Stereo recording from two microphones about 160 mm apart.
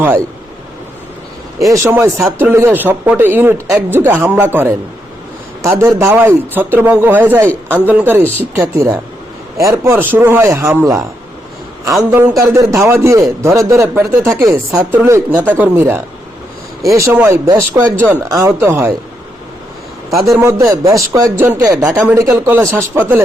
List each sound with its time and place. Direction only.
1.7 s a man's voice: 20° right (ahead or behind)
20.1 s a man's voice: 20° right (ahead or behind)